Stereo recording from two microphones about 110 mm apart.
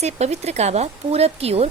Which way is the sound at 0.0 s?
85° right.